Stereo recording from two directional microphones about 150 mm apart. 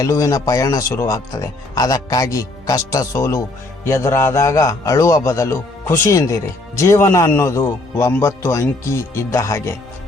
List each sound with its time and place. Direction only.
0.0 s a man's voice: 20° left (ahead or behind)